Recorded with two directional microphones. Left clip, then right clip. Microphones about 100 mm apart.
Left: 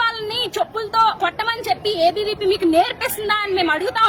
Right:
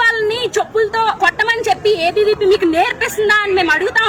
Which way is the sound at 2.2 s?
50° left (ahead or behind).